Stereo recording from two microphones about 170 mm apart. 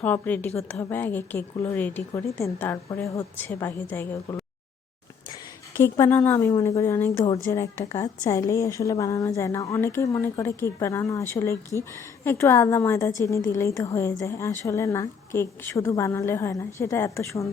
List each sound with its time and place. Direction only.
0.0 s a woman's voice: 10° left (ahead or behind)
5.8 s a woman's voice: 15° left (ahead or behind)